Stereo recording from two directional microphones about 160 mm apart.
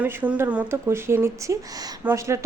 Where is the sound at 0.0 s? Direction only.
10° right (ahead or behind).